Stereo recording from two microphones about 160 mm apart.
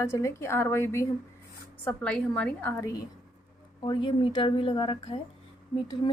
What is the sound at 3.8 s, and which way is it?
A woman's voice, 30° left (ahead or behind).